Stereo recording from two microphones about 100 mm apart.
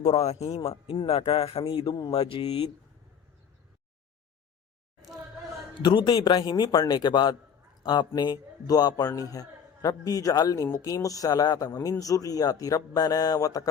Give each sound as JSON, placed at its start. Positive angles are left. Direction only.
{"t": 0.0, "sound": "speech", "side_deg": 90}
{"t": 1.6, "sound": "a man's voice", "side_deg": 55}
{"t": 2.1, "sound": "speech", "side_deg": 70}
{"t": 5.7, "sound": "a man's voice", "side_deg": 55}